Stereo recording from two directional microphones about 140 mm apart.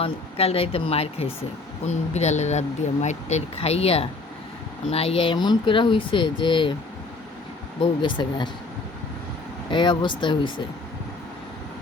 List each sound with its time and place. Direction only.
0.0 s speech: 45° left (ahead or behind)
8.0 s speech: 30° left (ahead or behind)
9.6 s speech: 35° left (ahead or behind)